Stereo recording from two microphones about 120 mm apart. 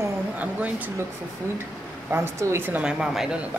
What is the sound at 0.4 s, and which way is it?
Speech, 15° right (ahead or behind).